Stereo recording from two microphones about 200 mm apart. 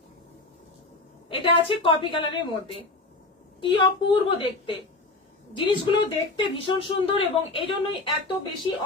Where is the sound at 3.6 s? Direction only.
25° left (ahead or behind).